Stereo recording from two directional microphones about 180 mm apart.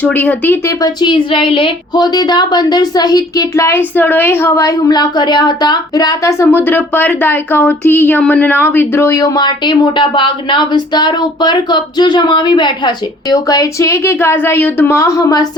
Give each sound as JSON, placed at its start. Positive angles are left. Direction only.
{"t": 0.0, "sound": "a woman's voice", "side_deg": 10}
{"t": 1.0, "sound": "a woman's voice", "side_deg": 30}